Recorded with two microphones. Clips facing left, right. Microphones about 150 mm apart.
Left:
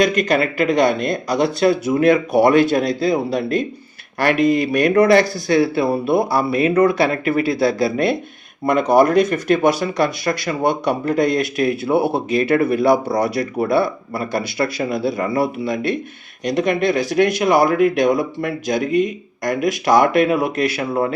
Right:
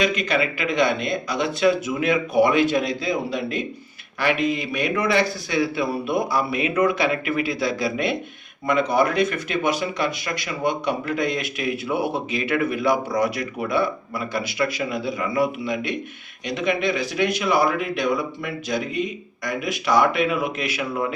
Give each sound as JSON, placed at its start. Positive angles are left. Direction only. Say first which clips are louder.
{"t": 0.0, "sound": "speech", "louder": "left 5 dB", "side_deg": 45}